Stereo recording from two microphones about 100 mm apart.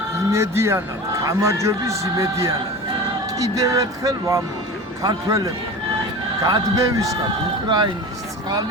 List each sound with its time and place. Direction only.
0.3 s a man's voice: 30° right (ahead or behind)